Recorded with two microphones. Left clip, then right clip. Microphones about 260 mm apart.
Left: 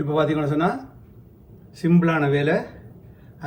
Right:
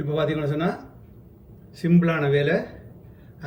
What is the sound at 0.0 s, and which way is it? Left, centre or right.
Speech, centre.